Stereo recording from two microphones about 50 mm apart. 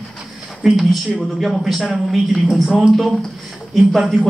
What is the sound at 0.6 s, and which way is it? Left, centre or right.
A man's voice, centre.